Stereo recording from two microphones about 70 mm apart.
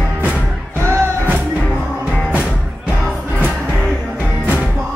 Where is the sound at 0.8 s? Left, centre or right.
Right.